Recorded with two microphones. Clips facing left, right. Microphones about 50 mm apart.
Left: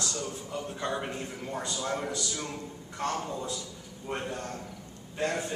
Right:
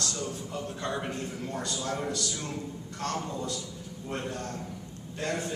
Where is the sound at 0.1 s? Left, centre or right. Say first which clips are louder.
Even; centre.